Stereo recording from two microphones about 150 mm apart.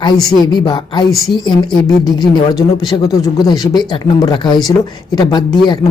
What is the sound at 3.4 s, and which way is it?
A woman's voice, 25° left (ahead or behind).